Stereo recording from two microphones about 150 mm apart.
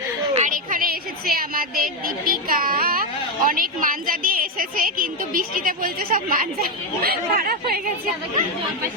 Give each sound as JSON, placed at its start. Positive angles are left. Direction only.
{"t": 0.3, "sound": "a woman's voice", "side_deg": -60}